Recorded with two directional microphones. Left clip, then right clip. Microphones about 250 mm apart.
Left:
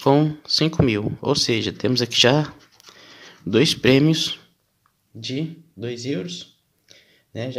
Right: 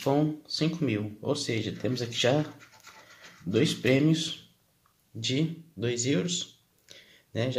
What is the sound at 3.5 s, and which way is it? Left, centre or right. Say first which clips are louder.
Speech: left 8 dB; left.